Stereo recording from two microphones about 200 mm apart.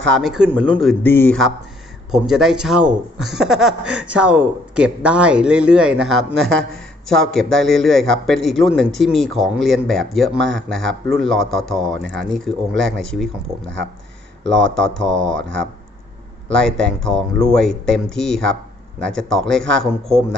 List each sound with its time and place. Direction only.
0.0 s speech: centre (ahead or behind)
1.0 s speech: 10° left (ahead or behind)
6.1 s speech: 90° right
7.1 s speech: centre (ahead or behind)
10.3 s speech: 70° right (ahead or behind)
10.7 s speech: centre (ahead or behind)
14.4 s speech: 70° right (ahead or behind)
15.2 s speech: 5° left (ahead or behind)
16.5 s speech: 5° left (ahead or behind)